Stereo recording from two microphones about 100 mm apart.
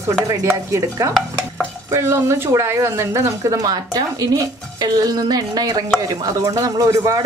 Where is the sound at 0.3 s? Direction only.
30° right (ahead or behind).